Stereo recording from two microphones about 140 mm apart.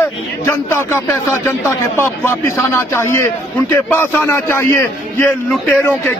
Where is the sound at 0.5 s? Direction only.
15° left (ahead or behind).